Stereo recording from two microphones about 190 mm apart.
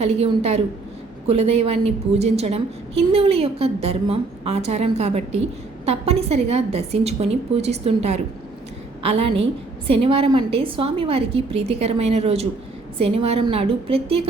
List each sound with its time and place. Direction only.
0.0 s a woman's voice: 35° right (ahead or behind)